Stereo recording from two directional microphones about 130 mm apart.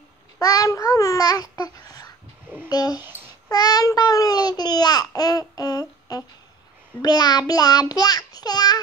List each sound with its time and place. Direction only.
0.4 s speech: 25° left (ahead or behind)
3.0 s babbling: 15° right (ahead or behind)
3.4 s speech: 30° left (ahead or behind)